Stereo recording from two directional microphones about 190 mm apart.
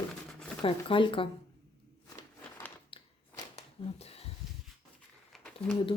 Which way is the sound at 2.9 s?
30° left (ahead or behind).